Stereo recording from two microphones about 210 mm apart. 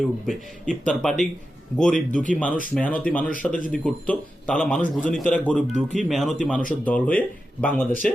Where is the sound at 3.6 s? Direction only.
40° left (ahead or behind).